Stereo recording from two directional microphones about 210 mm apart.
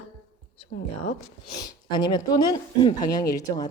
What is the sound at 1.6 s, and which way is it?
Speech, 20° left (ahead or behind).